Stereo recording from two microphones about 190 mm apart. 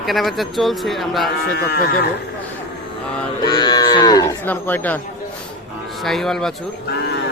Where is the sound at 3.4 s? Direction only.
20° left (ahead or behind).